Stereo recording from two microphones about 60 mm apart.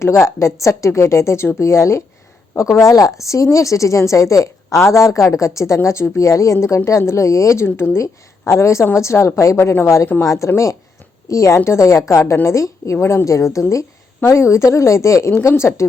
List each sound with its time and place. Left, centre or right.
0.0 s a woman's voice: left
2.6 s a woman's voice: left
9.6 s a woman's voice: left
12.2 s a woman's voice: left
14.2 s a woman's voice: left
15.3 s a woman's voice: left